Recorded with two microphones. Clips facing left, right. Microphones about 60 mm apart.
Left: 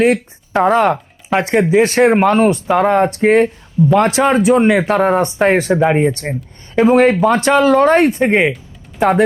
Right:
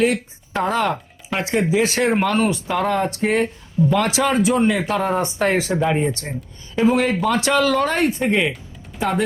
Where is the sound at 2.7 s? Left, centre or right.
Left.